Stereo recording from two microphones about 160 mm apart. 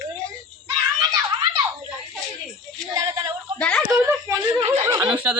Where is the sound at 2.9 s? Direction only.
20° right (ahead or behind).